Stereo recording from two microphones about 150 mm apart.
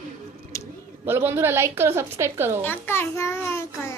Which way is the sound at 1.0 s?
15° right (ahead or behind).